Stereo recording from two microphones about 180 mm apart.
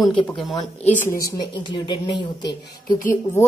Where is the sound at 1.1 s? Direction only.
20° left (ahead or behind).